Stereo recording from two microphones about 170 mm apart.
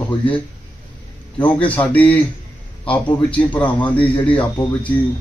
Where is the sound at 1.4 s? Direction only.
10° left (ahead or behind).